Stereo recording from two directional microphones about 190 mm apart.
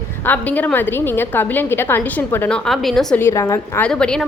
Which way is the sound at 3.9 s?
5° left (ahead or behind).